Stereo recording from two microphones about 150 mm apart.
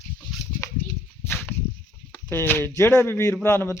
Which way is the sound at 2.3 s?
15° left (ahead or behind).